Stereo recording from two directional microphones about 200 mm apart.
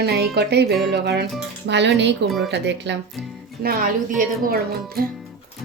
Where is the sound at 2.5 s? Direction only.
60° right (ahead or behind).